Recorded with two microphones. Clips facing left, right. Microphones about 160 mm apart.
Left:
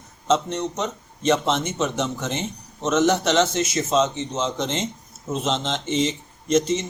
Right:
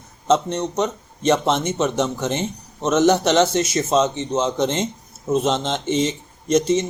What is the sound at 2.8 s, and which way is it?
A man's voice, 40° right (ahead or behind).